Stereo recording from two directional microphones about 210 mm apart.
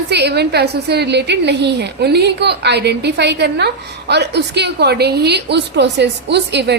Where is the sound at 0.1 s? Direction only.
55° right (ahead or behind).